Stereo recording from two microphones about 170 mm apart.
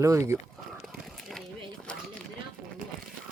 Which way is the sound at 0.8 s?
Centre (ahead or behind).